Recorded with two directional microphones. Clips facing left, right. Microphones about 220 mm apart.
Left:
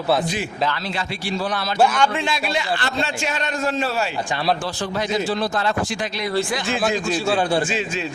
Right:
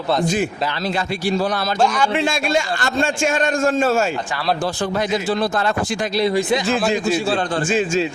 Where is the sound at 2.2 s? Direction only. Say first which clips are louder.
Right 5 dB; 45° right (ahead or behind).